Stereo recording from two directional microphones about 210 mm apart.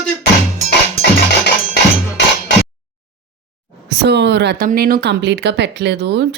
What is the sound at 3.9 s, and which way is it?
Speech, 55° right (ahead or behind).